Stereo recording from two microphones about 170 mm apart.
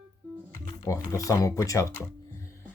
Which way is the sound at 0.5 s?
20° left (ahead or behind).